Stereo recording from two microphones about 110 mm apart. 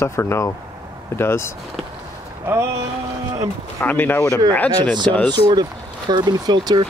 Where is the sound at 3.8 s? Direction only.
20° left (ahead or behind).